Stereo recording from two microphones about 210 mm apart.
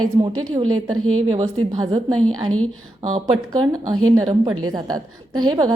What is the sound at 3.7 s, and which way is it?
A woman's voice, 15° right (ahead or behind).